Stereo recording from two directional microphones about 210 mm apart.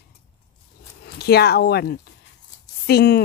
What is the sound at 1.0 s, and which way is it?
Speech, 50° left (ahead or behind).